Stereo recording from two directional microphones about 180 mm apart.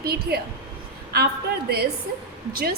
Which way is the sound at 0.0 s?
60° right (ahead or behind).